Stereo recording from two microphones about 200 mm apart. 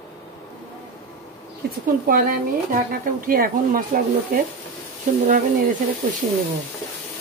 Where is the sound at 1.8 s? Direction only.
45° right (ahead or behind).